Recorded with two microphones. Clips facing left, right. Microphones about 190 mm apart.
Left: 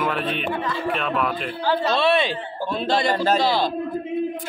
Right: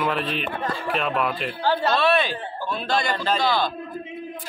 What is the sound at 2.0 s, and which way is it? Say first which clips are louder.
Speech: left 1 dB; 25° left (ahead or behind).